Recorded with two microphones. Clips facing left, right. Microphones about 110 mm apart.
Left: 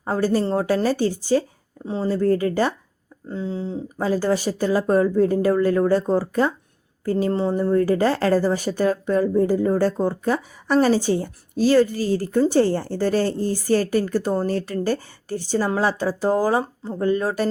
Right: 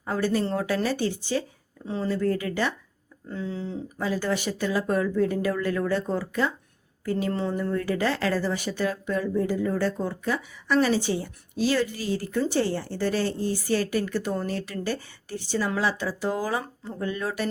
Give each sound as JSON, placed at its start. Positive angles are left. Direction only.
{"t": 0.0, "sound": "speech", "side_deg": 35}
{"t": 3.2, "sound": "speech", "side_deg": 25}